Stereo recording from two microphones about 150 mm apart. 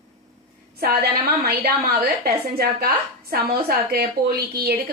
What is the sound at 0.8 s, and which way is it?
A woman's voice, 90° right.